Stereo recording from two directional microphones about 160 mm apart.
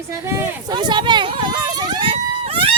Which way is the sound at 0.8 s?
30° right (ahead or behind).